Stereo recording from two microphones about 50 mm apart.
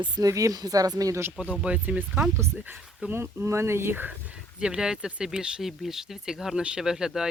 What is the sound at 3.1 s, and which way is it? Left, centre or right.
Speech, right.